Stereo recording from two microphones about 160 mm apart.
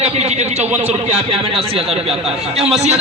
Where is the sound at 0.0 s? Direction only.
40° right (ahead or behind).